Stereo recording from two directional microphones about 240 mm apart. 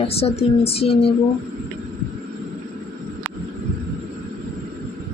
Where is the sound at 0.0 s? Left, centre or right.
Left.